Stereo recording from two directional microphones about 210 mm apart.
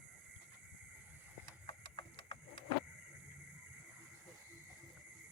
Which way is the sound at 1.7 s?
25° left (ahead or behind).